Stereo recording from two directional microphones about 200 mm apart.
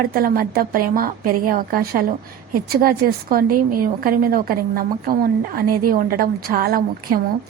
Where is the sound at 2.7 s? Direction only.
45° right (ahead or behind).